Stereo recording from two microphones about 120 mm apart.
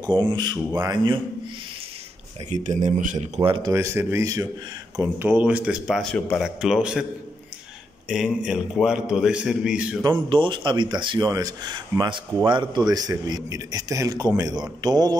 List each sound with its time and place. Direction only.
0.0 s speech: 40° right (ahead or behind)
2.5 s speech: 90° right
3.4 s speech: 40° right (ahead or behind)
3.7 s speech: 20° right (ahead or behind)
4.9 s a man's voice: 15° right (ahead or behind)
6.0 s a man's voice: 5° left (ahead or behind)
6.4 s a man's voice: 5° right (ahead or behind)
8.5 s a man's voice: 5° right (ahead or behind)
10.0 s speech: 45° right (ahead or behind)